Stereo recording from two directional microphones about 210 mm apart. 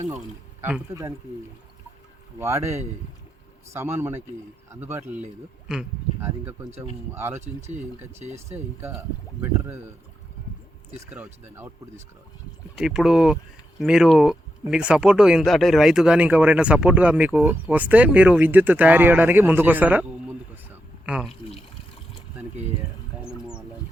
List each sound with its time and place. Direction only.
0.6 s speech: 10° right (ahead or behind)
2.4 s speech: 15° right (ahead or behind)
7.1 s speech: 10° right (ahead or behind)
8.2 s speech: 30° right (ahead or behind)
8.5 s speech: 10° right (ahead or behind)
11.0 s speech: 10° right (ahead or behind)
21.1 s speech: 5° right (ahead or behind)
23.1 s a sound: 10° right (ahead or behind)